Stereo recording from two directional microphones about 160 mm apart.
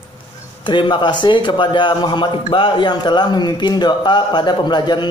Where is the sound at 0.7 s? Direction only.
30° left (ahead or behind).